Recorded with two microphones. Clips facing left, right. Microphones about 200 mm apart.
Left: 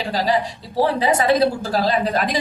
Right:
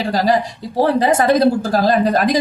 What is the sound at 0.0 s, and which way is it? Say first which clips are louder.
A woman's voice: right 4 dB; 45° right (ahead or behind).